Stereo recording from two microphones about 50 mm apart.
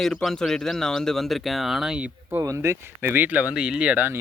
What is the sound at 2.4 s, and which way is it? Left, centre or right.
Speech, right.